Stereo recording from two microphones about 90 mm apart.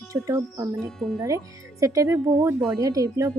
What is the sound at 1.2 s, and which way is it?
Speech, 35° right (ahead or behind).